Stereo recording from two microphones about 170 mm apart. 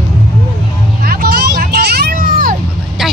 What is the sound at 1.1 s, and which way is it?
Vehicle, 60° right (ahead or behind).